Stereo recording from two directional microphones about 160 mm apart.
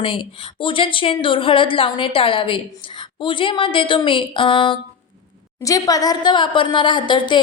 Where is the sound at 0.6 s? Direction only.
30° left (ahead or behind).